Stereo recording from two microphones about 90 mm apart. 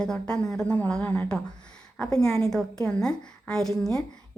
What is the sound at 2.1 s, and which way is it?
A woman's voice, 5° left (ahead or behind).